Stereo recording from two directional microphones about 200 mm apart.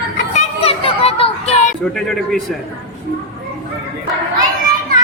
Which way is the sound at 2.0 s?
Centre (ahead or behind).